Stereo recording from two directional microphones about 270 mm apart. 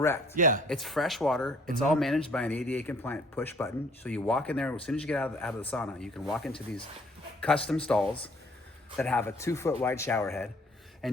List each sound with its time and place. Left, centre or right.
0.3 s speech: right
0.7 s a man's voice: centre
11.0 s a sound: centre